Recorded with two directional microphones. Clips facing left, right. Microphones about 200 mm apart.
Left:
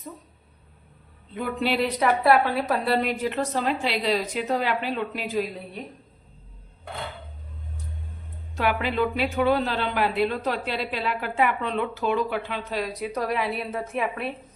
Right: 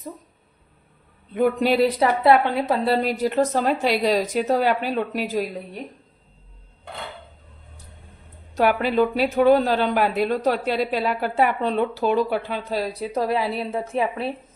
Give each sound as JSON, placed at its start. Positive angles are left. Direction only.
{"t": 1.3, "sound": "speech", "side_deg": -45}
{"t": 2.0, "sound": "a woman's voice", "side_deg": -25}
{"t": 8.5, "sound": "a woman's voice", "side_deg": -40}